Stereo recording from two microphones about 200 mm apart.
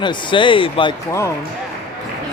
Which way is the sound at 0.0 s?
25° left (ahead or behind).